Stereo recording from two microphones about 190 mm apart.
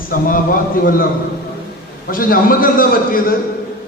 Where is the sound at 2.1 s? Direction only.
50° left (ahead or behind).